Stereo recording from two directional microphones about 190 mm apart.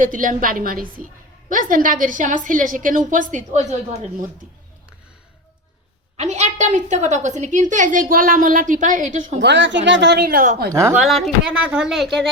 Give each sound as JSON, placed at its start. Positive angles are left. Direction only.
{"t": 0.0, "sound": "a woman's voice", "side_deg": -45}
{"t": 6.1, "sound": "a woman's voice", "side_deg": -35}
{"t": 9.4, "sound": "speech", "side_deg": -70}
{"t": 10.7, "sound": "a woman's voice", "side_deg": -15}
{"t": 11.0, "sound": "speech", "side_deg": 0}